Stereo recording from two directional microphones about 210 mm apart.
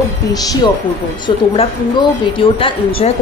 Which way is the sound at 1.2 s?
20° left (ahead or behind).